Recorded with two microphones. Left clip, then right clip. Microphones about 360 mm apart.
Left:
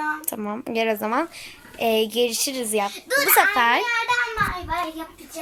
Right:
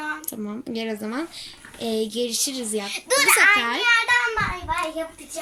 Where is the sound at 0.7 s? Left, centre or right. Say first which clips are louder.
Left 8 dB; centre.